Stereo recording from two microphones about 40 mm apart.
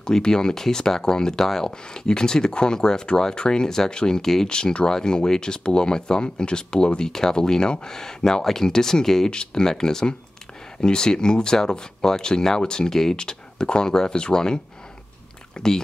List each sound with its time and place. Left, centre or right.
0.0 s speech: centre
4.5 s speech: left